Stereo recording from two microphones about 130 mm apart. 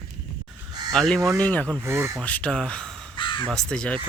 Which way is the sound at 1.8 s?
20° right (ahead or behind).